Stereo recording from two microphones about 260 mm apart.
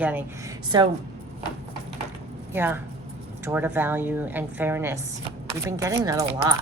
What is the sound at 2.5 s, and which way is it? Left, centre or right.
A woman's voice, centre.